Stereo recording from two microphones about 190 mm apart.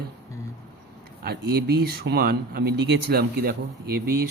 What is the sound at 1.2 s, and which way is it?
Speech, 60° right (ahead or behind).